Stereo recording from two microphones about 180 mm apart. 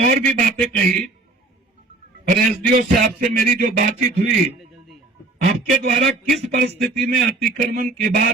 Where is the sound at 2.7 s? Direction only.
50° right (ahead or behind).